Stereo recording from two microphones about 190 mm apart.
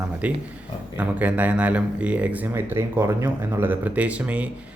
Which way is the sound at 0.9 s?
10° right (ahead or behind).